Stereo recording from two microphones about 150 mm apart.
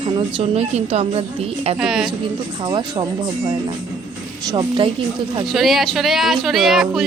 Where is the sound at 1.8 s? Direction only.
5° right (ahead or behind).